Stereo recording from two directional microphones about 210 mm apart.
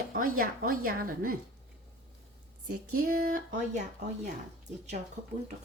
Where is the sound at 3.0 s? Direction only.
45° right (ahead or behind).